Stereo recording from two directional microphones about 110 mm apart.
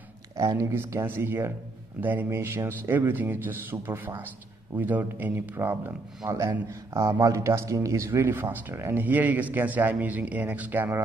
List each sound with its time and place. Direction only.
0.4 s a man's voice: 30° right (ahead or behind)